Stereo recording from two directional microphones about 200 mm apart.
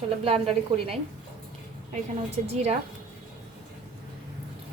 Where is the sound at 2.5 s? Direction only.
30° right (ahead or behind).